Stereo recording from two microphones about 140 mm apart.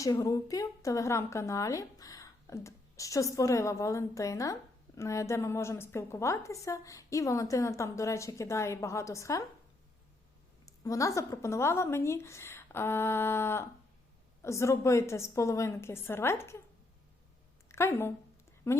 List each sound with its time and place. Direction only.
0.0 s a woman's voice: 25° left (ahead or behind)
10.7 s a woman's voice: 25° left (ahead or behind)
17.7 s a woman's voice: 20° left (ahead or behind)